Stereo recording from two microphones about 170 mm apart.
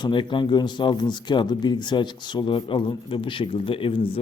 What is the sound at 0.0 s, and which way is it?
Speech, 30° left (ahead or behind).